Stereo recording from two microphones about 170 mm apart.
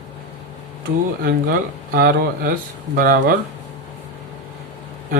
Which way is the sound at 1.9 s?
60° right (ahead or behind).